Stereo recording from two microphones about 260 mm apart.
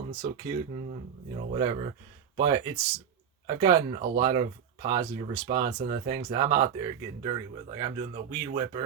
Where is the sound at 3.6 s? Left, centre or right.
Right.